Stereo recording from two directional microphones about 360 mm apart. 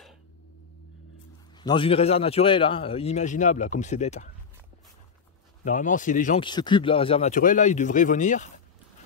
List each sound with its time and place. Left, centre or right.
1.6 s a man's voice: centre
5.6 s speech: left